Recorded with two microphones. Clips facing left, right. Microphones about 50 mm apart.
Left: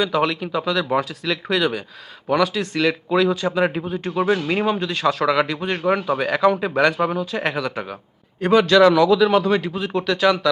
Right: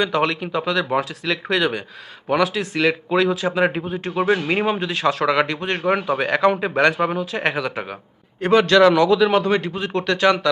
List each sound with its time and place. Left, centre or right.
0.0 s a man's voice: centre